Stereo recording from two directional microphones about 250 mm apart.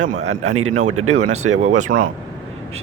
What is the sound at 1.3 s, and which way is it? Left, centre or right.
Speech, right.